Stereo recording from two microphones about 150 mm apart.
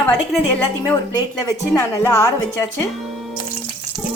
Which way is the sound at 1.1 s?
20° left (ahead or behind).